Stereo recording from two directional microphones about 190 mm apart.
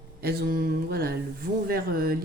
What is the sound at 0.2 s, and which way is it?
A woman's voice, 55° right (ahead or behind).